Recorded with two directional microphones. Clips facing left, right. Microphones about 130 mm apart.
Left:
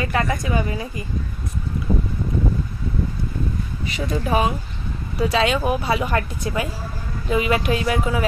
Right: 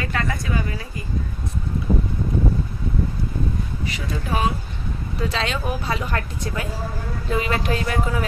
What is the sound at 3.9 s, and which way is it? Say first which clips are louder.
A woman's voice: left 7 dB; 20° left (ahead or behind).